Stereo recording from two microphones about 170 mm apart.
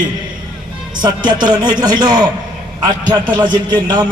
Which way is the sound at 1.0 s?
25° right (ahead or behind).